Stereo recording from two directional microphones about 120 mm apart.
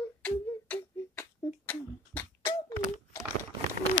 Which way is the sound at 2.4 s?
30° left (ahead or behind).